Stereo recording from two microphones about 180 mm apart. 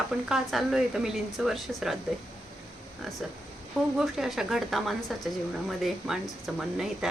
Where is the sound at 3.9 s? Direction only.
Centre (ahead or behind).